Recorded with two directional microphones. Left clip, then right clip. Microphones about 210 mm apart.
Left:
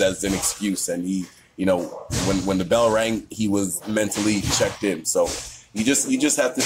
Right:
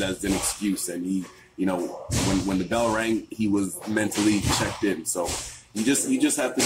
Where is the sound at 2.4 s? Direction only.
50° left (ahead or behind).